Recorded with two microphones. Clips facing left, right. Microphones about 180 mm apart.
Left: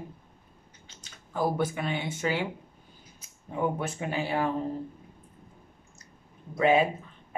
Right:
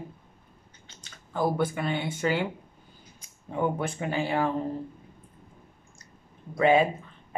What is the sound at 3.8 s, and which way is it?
Speech, 5° left (ahead or behind).